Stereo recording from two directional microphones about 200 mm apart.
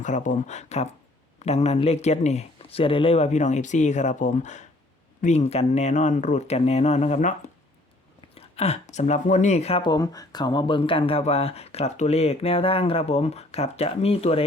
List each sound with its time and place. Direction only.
0.0 s speech: 40° left (ahead or behind)